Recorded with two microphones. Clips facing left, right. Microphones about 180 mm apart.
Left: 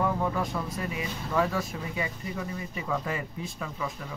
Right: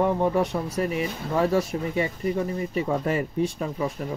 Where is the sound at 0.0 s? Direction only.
30° right (ahead or behind).